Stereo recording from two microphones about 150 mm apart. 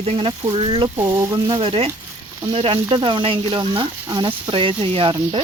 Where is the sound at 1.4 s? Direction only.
35° right (ahead or behind).